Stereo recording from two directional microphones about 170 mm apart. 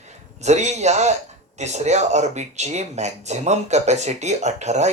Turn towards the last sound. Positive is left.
turn(degrees=-40)  # may be behind; listen again after turning